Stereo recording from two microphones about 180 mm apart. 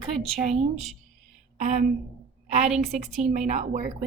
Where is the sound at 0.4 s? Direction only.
40° right (ahead or behind).